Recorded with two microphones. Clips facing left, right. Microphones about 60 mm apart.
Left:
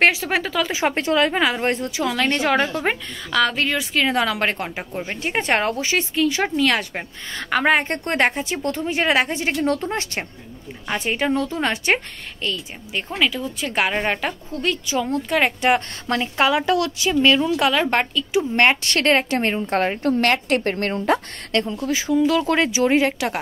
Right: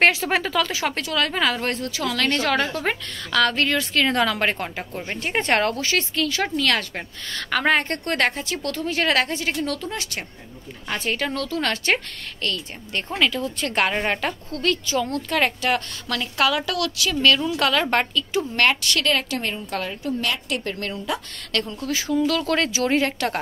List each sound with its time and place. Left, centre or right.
0.0 s speech: centre
0.7 s a woman's voice: left
10.9 s a woman's voice: centre
12.4 s a woman's voice: centre
15.6 s a woman's voice: left; by 18.5 s centre
18.6 s a woman's voice: left
21.5 s a woman's voice: left; by 23.4 s centre